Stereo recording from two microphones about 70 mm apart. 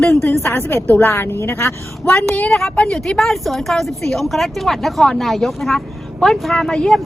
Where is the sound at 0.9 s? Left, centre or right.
Left.